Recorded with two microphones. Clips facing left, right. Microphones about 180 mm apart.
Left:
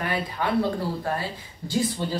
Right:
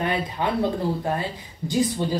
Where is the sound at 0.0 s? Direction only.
20° right (ahead or behind).